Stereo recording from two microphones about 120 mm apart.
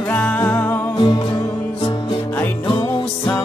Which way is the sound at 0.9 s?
40° left (ahead or behind).